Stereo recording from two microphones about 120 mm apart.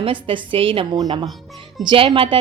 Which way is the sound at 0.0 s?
45° right (ahead or behind).